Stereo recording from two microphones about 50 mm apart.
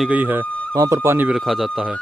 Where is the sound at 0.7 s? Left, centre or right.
Right.